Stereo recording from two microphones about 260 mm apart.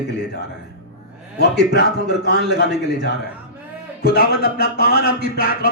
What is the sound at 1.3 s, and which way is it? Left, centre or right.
Speech, left.